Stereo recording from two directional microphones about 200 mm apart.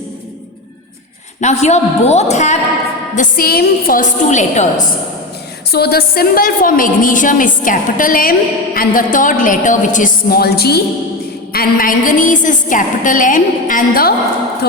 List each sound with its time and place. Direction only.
1.4 s a woman's voice: 35° left (ahead or behind)
3.2 s a woman's voice: 45° left (ahead or behind)
5.7 s a woman's voice: 50° left (ahead or behind)